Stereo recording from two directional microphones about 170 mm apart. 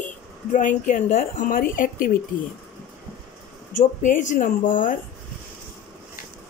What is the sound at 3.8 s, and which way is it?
A woman's voice, 50° left (ahead or behind).